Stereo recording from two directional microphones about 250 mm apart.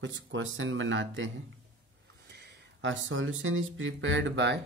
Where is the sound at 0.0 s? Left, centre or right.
Right.